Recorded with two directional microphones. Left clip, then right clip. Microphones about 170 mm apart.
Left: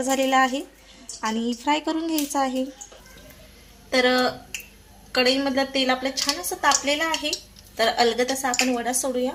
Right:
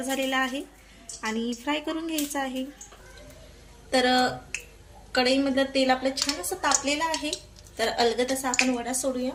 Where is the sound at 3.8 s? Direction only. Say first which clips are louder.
Left 2 dB; 25° left (ahead or behind).